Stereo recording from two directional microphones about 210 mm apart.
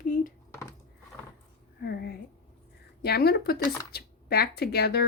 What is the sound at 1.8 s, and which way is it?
A woman's voice, 50° left (ahead or behind).